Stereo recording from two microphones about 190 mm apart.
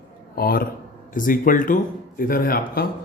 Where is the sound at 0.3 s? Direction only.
50° left (ahead or behind).